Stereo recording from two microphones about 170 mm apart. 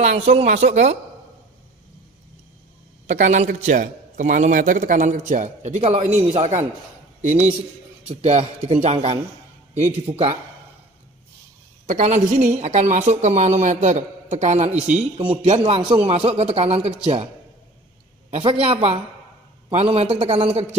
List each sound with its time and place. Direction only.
0.0 s a man's voice: 40° right (ahead or behind)
3.1 s a man's voice: 45° right (ahead or behind)
8.1 s a man's voice: 40° right (ahead or behind)
11.9 s a man's voice: 45° right (ahead or behind)
18.3 s a man's voice: 35° right (ahead or behind)